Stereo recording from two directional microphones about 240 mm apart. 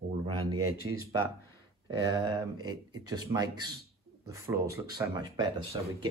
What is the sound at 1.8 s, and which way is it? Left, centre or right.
Speech, centre.